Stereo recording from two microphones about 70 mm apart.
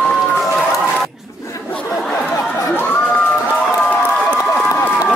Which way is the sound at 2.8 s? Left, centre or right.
Left.